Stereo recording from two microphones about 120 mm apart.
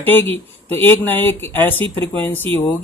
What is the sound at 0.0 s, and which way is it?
Speech, 15° left (ahead or behind).